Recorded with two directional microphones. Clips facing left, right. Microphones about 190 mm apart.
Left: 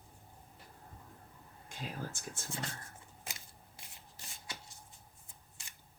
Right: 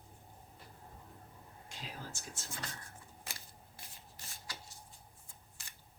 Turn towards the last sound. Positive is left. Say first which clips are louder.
# left 1 dB
turn(degrees=20)  # may be behind; listen again after turning